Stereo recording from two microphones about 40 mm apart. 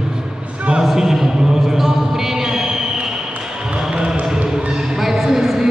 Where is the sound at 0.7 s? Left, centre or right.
Centre.